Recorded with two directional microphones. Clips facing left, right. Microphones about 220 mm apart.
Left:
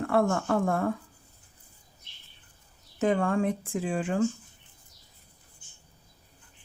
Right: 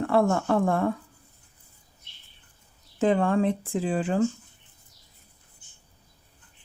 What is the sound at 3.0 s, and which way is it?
Speech, 30° right (ahead or behind).